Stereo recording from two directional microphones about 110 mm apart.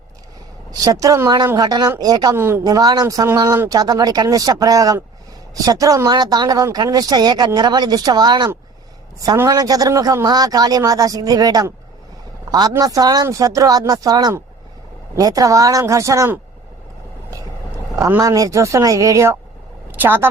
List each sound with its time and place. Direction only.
0.7 s speech: 35° right (ahead or behind)
2.3 s a woman's voice: 20° right (ahead or behind)
2.6 s a woman's voice: 35° right (ahead or behind)
17.3 s vehicle: 30° right (ahead or behind)
18.2 s a woman's voice: 30° right (ahead or behind)